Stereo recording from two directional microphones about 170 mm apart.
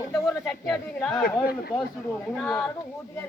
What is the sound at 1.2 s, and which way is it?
Speech, 65° left (ahead or behind).